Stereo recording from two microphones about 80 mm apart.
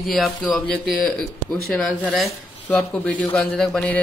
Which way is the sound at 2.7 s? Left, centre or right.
Centre.